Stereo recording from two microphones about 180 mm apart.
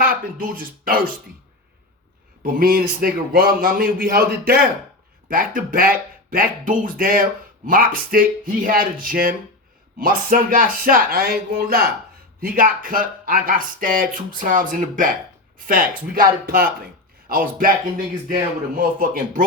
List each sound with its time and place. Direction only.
0.0 s speech: 50° right (ahead or behind)
2.4 s speech: 55° right (ahead or behind)
18.8 s speech: 50° right (ahead or behind)